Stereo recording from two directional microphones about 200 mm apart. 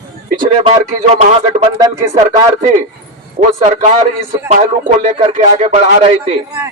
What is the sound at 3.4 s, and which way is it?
Speech, 25° right (ahead or behind).